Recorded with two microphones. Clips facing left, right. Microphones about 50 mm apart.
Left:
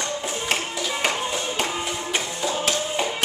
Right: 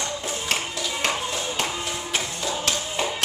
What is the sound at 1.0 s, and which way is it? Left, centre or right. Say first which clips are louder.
Music: left 1 dB; centre.